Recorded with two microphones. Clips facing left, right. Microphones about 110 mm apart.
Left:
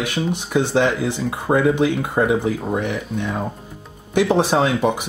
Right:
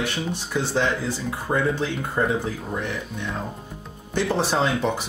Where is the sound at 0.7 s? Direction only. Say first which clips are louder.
Left 4 dB; 65° left (ahead or behind).